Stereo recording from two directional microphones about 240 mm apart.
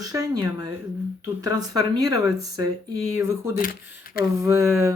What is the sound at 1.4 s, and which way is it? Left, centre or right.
Speech, centre.